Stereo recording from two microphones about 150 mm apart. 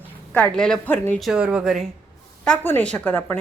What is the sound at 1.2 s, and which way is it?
Speech, 5° right (ahead or behind).